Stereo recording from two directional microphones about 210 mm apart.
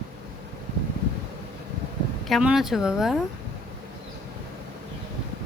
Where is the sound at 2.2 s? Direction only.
Centre (ahead or behind).